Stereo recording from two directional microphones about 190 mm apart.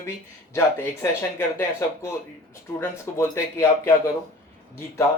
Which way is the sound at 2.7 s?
15° left (ahead or behind).